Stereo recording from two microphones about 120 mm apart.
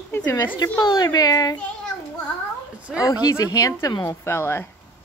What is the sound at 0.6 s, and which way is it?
Speech, 35° left (ahead or behind).